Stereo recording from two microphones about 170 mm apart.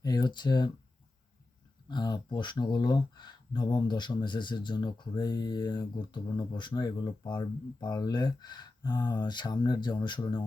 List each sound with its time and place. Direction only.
0.0 s speech: 25° left (ahead or behind)
1.9 s speech: 25° left (ahead or behind)